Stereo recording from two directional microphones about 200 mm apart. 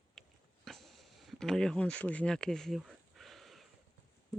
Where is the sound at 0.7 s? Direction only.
Centre (ahead or behind).